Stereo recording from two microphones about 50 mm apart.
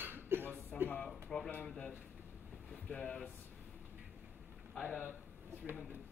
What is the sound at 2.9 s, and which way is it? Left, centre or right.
Speech, left.